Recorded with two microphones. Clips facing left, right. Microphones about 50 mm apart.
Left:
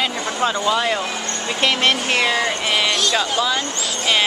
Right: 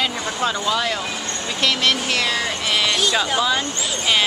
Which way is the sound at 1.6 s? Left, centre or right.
Left.